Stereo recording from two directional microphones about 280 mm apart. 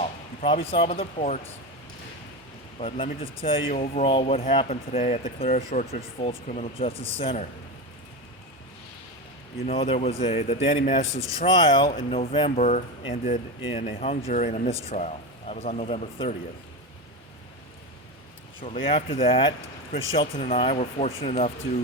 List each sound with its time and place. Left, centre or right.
0.0 s speech: centre
2.8 s speech: centre
9.6 s speech: left
18.6 s speech: left